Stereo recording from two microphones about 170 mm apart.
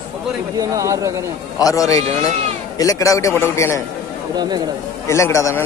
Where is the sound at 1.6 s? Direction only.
20° left (ahead or behind).